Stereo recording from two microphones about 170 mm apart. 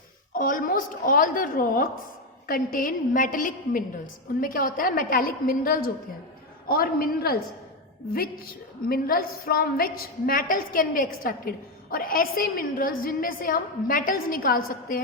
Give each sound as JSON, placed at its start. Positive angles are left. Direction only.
{"t": 0.3, "sound": "a woman's voice", "side_deg": 55}
{"t": 8.9, "sound": "a woman's voice", "side_deg": 60}